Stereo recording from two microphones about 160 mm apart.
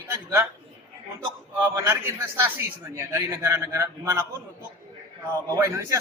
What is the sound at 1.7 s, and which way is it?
A man's voice, 20° right (ahead or behind).